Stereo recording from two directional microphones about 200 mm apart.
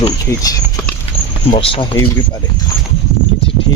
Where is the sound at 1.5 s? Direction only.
30° left (ahead or behind).